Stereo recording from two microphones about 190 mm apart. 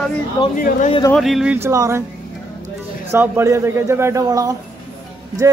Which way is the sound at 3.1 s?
15° right (ahead or behind).